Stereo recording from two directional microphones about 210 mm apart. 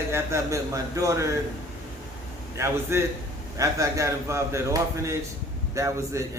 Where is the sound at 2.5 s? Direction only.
10° right (ahead or behind).